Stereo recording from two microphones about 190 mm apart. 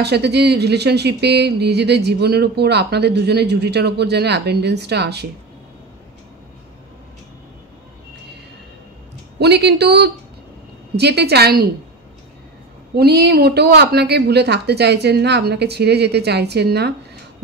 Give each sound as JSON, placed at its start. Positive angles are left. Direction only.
{"t": 0.0, "sound": "speech", "side_deg": -60}
{"t": 9.4, "sound": "speech", "side_deg": -60}
{"t": 12.9, "sound": "speech", "side_deg": -60}